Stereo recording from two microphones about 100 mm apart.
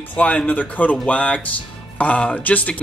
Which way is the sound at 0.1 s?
15° left (ahead or behind).